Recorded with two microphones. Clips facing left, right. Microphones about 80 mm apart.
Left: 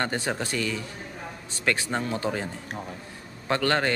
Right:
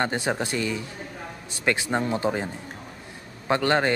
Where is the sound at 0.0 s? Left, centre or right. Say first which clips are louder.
Right 3 dB; centre.